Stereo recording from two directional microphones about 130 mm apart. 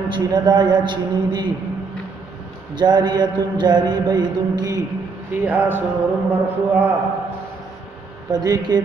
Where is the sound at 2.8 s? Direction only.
35° right (ahead or behind).